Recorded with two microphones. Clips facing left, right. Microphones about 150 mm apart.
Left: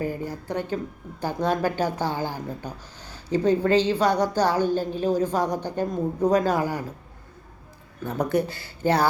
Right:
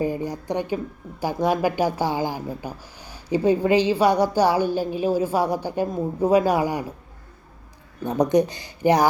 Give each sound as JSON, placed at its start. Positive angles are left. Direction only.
{"t": 0.0, "sound": "speech", "side_deg": -15}
{"t": 8.0, "sound": "speech", "side_deg": -20}